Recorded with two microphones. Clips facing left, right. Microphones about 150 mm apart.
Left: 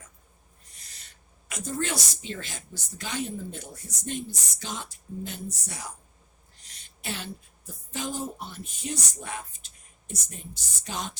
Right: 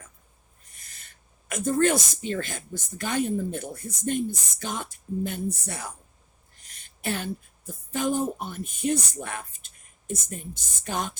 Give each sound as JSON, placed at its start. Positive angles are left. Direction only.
{"t": 0.8, "sound": "a woman's voice", "side_deg": -50}
{"t": 6.6, "sound": "a sound", "side_deg": -50}
{"t": 7.9, "sound": "a woman's voice", "side_deg": -55}